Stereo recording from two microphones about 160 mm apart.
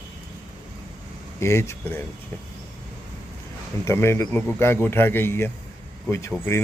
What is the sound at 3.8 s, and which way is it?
Speech, 15° left (ahead or behind).